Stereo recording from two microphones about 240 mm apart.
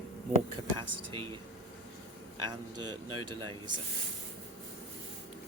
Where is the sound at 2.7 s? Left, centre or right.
Right.